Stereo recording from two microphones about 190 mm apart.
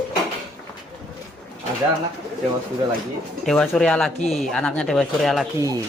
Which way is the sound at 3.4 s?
5° left (ahead or behind).